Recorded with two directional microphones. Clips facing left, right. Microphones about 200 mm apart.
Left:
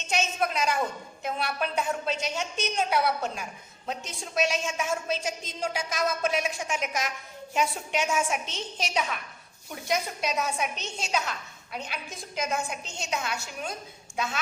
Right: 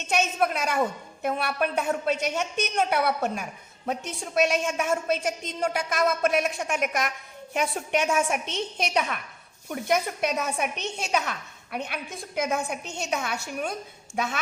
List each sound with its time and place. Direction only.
0.1 s a woman's voice: 55° right (ahead or behind)